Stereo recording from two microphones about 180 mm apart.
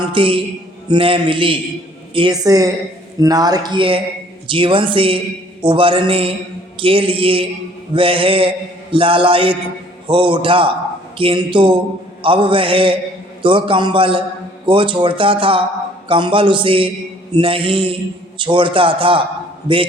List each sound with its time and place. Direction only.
0.1 s mantra: 30° right (ahead or behind)